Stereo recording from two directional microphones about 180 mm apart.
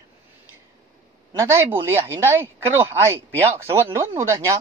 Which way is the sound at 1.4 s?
15° right (ahead or behind).